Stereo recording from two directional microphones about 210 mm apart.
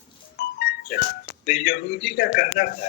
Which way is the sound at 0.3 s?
45° left (ahead or behind).